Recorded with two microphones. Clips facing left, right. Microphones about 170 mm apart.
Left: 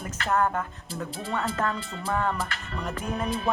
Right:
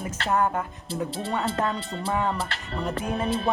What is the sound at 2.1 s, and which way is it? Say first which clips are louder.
Speech: right 1 dB; 20° right (ahead or behind).